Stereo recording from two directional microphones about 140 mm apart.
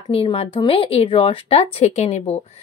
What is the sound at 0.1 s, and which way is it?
A woman's voice, 45° left (ahead or behind).